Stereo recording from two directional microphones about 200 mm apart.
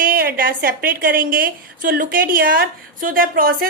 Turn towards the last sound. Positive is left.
turn(degrees=-45)  # may be behind; listen again after turning